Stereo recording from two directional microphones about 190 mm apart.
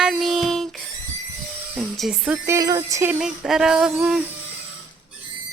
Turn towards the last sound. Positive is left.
turn(degrees=0)  # may be behind; listen again after turning